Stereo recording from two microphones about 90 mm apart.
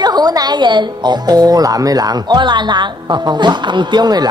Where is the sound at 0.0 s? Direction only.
50° right (ahead or behind).